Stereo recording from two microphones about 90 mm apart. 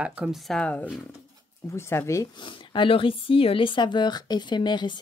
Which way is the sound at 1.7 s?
30° left (ahead or behind).